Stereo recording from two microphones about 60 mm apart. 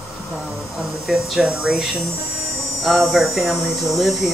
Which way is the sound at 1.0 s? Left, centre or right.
Centre.